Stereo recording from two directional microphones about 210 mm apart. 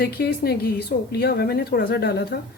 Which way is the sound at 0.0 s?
50° left (ahead or behind).